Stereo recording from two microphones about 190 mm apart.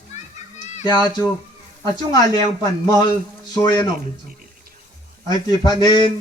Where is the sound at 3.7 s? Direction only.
25° left (ahead or behind).